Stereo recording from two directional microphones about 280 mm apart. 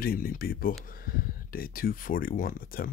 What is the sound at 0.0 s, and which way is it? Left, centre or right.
Speech, left.